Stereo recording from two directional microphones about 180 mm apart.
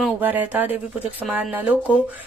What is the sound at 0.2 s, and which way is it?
A woman's voice, 10° right (ahead or behind).